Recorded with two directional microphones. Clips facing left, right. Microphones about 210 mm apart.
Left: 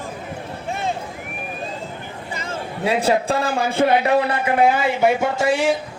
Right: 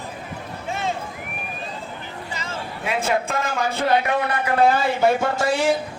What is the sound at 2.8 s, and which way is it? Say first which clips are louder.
A man's voice: left 5 dB; 35° left (ahead or behind).